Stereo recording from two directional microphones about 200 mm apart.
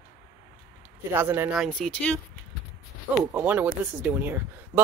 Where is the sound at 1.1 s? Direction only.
10° right (ahead or behind); by 2.2 s 5° left (ahead or behind).